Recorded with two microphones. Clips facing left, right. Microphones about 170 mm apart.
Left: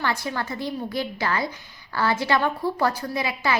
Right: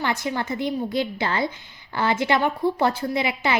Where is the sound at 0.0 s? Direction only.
20° right (ahead or behind).